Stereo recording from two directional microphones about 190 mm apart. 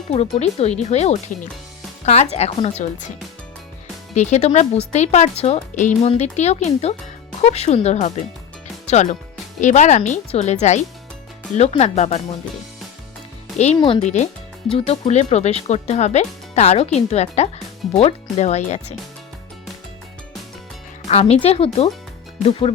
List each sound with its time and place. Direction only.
0.1 s speech: 35° left (ahead or behind)
4.1 s speech: 35° left (ahead or behind)
13.7 s speech: 30° left (ahead or behind)
21.1 s speech: 35° left (ahead or behind)